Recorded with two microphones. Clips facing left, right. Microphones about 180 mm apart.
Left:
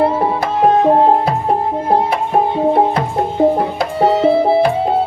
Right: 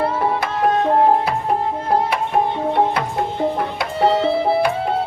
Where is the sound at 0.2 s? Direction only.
25° left (ahead or behind).